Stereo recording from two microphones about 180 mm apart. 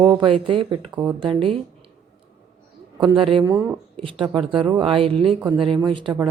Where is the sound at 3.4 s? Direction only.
15° right (ahead or behind).